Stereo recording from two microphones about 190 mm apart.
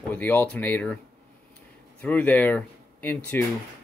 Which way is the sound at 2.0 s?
10° left (ahead or behind).